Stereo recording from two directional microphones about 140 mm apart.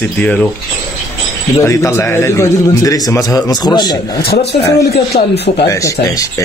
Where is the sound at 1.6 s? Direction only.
20° left (ahead or behind).